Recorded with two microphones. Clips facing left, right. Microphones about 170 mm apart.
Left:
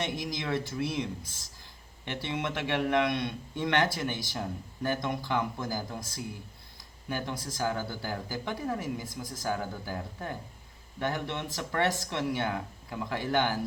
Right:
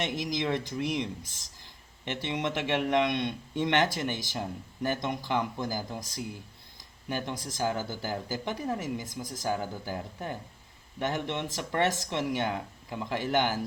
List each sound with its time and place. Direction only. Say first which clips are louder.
0.0 s speech: right 3 dB; 20° right (ahead or behind)